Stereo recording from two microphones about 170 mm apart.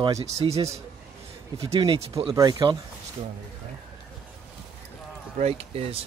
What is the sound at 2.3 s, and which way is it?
Speech, 20° right (ahead or behind).